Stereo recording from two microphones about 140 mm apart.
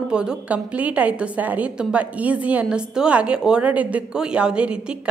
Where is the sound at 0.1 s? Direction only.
5° right (ahead or behind).